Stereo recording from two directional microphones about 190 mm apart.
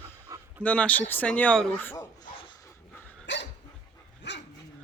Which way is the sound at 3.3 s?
70° left (ahead or behind).